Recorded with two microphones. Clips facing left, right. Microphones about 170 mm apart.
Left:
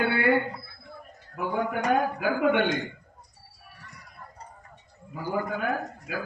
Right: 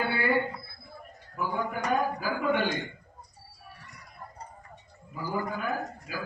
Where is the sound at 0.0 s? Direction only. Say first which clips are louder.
Left 4 dB; 65° left (ahead or behind).